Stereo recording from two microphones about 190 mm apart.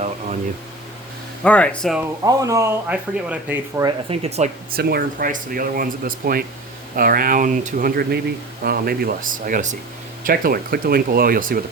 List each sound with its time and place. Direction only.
1.5 s speech: 5° left (ahead or behind)
2.2 s speech: 15° right (ahead or behind)
3.8 s speech: 30° right (ahead or behind)
4.7 s speech: 55° right (ahead or behind)